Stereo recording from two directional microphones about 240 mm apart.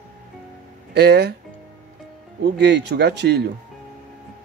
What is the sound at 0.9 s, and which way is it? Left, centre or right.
Speech, right.